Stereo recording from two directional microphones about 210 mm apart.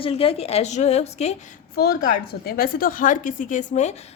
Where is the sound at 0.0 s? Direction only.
25° left (ahead or behind).